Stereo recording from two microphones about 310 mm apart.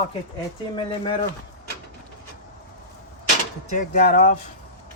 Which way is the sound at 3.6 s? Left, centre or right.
Left.